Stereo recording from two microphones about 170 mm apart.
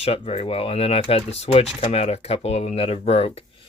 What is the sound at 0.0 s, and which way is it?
Speech, 35° left (ahead or behind).